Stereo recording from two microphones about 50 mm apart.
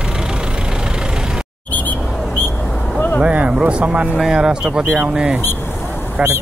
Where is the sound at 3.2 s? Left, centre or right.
Right.